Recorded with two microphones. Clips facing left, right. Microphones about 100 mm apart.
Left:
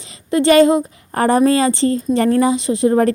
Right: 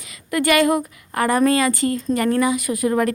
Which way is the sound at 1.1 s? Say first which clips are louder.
Left 4 dB; 30° left (ahead or behind).